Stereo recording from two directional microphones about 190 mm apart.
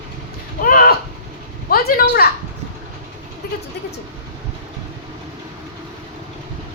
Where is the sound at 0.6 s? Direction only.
50° left (ahead or behind).